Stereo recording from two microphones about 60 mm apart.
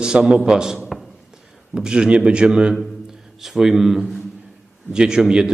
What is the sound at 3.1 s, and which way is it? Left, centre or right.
A man's voice, centre.